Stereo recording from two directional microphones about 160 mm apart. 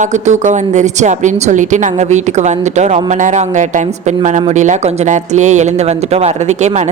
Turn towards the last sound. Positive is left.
turn(degrees=-45)  # may be behind; listen again after turning